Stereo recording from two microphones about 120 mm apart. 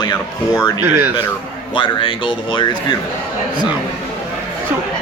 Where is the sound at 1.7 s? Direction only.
45° left (ahead or behind).